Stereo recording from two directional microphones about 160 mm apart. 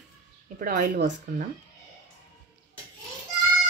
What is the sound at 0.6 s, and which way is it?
Speech, 55° right (ahead or behind).